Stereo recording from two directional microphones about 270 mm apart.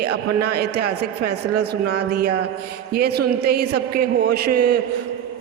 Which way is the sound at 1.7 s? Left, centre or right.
Right.